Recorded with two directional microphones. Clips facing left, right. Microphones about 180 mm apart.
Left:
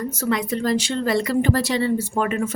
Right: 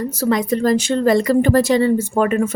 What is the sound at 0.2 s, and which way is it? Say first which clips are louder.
A woman's voice: right 6 dB; 40° right (ahead or behind).